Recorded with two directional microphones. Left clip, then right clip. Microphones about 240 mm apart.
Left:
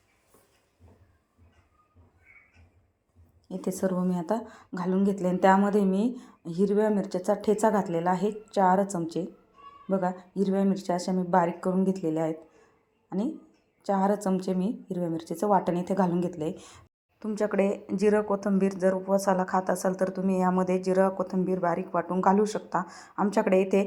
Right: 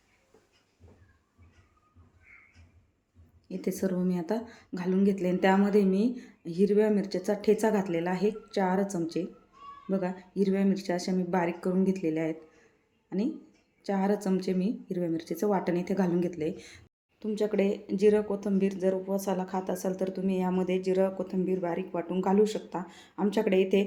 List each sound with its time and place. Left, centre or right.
3.5 s a woman's voice: centre